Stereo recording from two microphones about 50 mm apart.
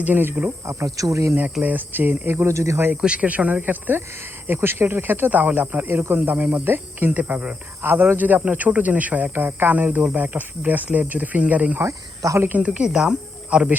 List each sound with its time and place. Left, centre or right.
0.0 s speech: right
0.7 s speech: right
1.6 s speech: right
2.5 s speech: right
3.2 s speech: right
5.3 s speech: right
7.8 s speech: right
9.3 s speech: right
11.8 s speech: right
12.5 s speech: right
12.9 s speech: centre